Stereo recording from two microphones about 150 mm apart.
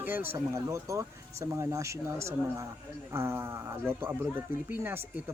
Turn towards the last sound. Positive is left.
turn(degrees=-15)  # may be behind; listen again after turning